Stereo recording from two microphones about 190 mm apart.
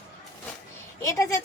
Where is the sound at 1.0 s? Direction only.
15° left (ahead or behind).